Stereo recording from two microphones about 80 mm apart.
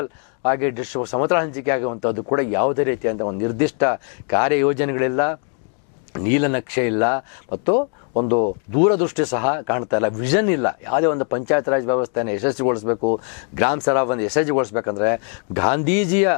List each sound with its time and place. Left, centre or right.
0.0 s speech: left